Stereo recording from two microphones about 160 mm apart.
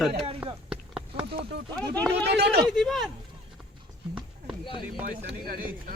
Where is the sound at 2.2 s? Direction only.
90° right.